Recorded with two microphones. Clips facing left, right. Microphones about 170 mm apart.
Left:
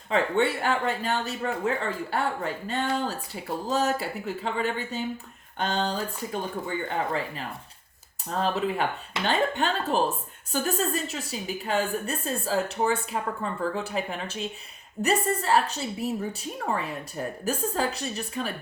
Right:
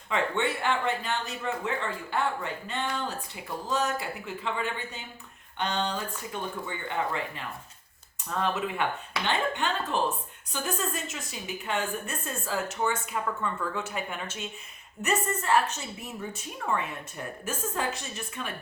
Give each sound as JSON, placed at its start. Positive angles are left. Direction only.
{"t": 0.1, "sound": "a woman's voice", "side_deg": 40}